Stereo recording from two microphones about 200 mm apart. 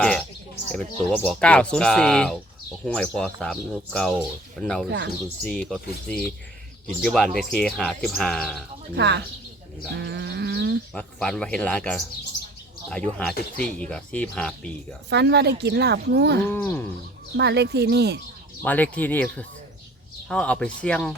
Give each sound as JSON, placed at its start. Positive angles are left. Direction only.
{"t": 0.0, "sound": "bird", "side_deg": 5}
{"t": 1.1, "sound": "speech", "side_deg": 5}
{"t": 4.9, "sound": "speech", "side_deg": -60}
{"t": 5.4, "sound": "speech", "side_deg": 5}
{"t": 9.0, "sound": "speech", "side_deg": -60}
{"t": 9.9, "sound": "bird", "side_deg": -60}
{"t": 10.9, "sound": "speech", "side_deg": 5}
{"t": 15.1, "sound": "speech", "side_deg": -55}
{"t": 16.5, "sound": "speech", "side_deg": 10}
{"t": 17.3, "sound": "speech", "side_deg": -55}
{"t": 18.6, "sound": "speech", "side_deg": 10}